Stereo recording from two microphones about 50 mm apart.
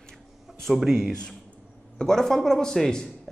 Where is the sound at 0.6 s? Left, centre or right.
Centre.